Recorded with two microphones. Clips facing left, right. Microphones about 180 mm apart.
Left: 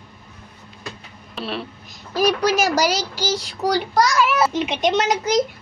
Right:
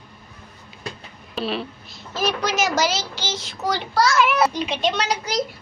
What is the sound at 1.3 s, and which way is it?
Speech, centre (ahead or behind).